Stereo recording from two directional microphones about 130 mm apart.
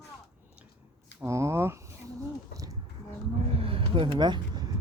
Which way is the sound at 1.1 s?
20° right (ahead or behind).